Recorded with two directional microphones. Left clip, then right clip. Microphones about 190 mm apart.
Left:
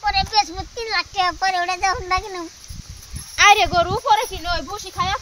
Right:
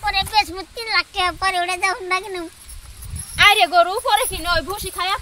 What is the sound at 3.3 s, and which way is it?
Speech, 35° left (ahead or behind).